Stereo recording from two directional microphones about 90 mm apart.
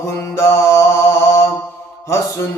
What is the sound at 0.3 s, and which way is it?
Mantra, 30° left (ahead or behind).